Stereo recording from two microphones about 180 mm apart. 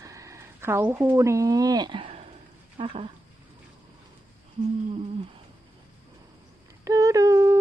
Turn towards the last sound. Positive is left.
turn(degrees=-15)  # may be behind; listen again after turning